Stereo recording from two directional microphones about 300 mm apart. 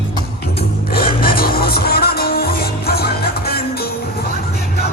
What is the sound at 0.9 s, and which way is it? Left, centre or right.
Music, left.